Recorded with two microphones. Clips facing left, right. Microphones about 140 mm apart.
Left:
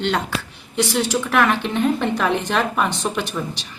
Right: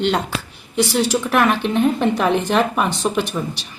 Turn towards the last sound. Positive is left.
turn(degrees=-15)  # may be behind; listen again after turning